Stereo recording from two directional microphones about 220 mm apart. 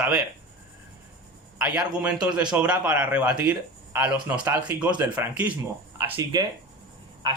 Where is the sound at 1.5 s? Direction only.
5° right (ahead or behind).